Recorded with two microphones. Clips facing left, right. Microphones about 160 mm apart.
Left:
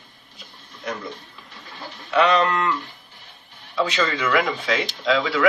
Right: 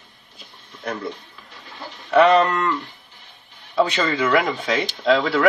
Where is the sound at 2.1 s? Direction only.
45° right (ahead or behind).